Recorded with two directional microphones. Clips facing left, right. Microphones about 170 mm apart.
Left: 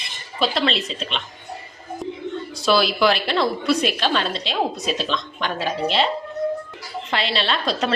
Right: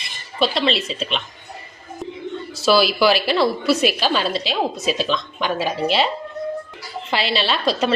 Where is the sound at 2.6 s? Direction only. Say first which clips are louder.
Right 2 dB; 5° right (ahead or behind).